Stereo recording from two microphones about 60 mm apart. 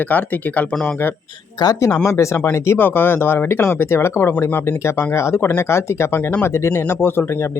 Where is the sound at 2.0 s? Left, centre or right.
Left.